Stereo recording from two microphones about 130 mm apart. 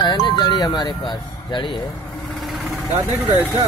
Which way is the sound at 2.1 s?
Centre (ahead or behind).